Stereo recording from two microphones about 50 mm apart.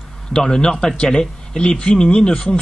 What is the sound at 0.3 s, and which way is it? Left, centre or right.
A man's voice, centre.